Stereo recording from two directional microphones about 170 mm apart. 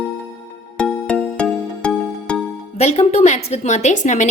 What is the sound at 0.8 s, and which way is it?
Music, 5° left (ahead or behind).